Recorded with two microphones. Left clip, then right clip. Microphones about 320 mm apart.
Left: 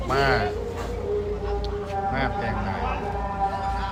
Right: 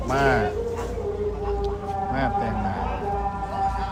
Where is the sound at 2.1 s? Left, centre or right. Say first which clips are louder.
Right 3 dB; centre.